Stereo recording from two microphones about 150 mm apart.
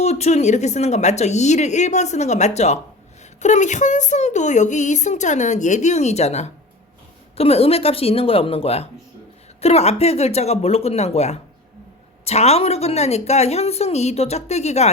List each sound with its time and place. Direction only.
0.0 s speech: 45° left (ahead or behind)